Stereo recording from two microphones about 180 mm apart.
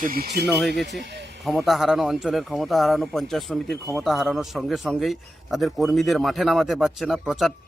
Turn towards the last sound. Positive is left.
turn(degrees=0)  # may be behind; listen again after turning